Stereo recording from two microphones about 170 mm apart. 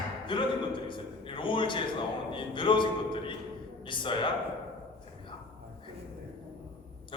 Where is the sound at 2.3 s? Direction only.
30° left (ahead or behind).